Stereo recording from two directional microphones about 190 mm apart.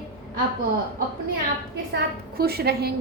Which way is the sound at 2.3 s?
55° right (ahead or behind).